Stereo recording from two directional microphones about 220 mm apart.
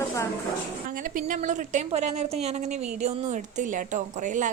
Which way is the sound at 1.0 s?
35° right (ahead or behind).